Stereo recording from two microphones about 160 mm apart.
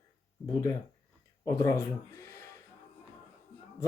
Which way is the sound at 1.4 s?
20° left (ahead or behind).